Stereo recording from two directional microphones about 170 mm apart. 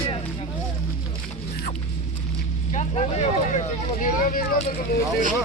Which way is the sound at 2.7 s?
40° left (ahead or behind).